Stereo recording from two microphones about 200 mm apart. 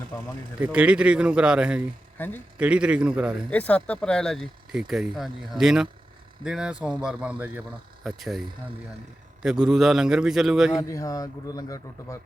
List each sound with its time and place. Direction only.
0.6 s speech: 5° right (ahead or behind)
2.1 s a man's voice: 10° left (ahead or behind)
2.6 s speech: 5° right (ahead or behind)
3.5 s speech: 5° left (ahead or behind)
10.8 s speech: 15° left (ahead or behind)